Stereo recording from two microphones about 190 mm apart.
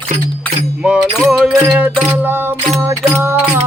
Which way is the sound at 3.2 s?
10° right (ahead or behind).